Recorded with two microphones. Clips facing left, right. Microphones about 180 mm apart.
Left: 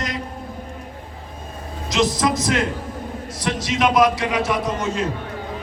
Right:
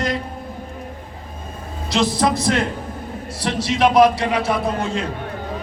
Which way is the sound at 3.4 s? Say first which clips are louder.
Right 3 dB; 30° right (ahead or behind).